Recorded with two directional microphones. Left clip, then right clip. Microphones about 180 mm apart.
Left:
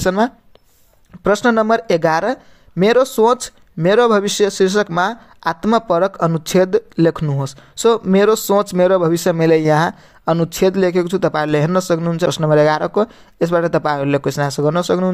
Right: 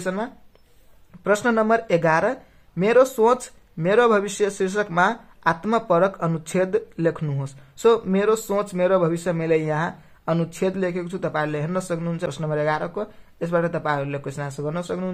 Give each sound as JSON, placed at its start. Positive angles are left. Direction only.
{"t": 0.0, "sound": "speech", "side_deg": 50}
{"t": 1.2, "sound": "speech", "side_deg": 40}